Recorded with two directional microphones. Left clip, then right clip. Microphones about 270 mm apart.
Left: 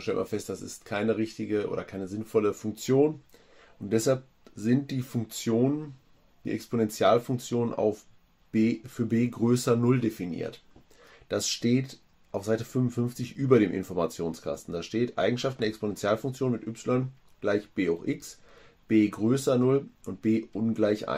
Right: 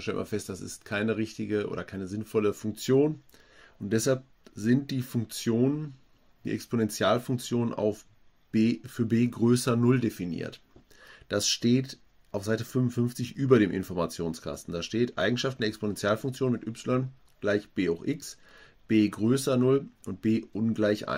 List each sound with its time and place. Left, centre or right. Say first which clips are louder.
0.0 s speech: left 3 dB; right